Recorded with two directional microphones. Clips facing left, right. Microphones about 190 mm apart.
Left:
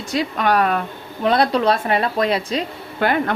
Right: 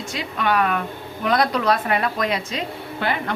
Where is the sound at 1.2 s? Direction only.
30° left (ahead or behind).